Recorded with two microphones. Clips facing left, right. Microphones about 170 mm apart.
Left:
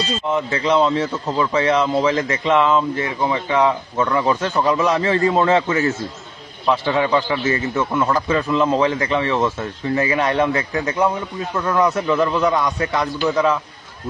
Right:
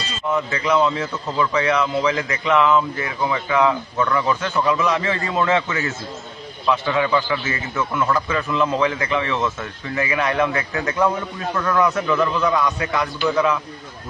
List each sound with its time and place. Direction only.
0.3 s a man's voice: 30° left (ahead or behind)